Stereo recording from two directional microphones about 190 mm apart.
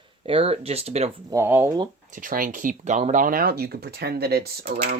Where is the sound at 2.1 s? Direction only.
45° right (ahead or behind).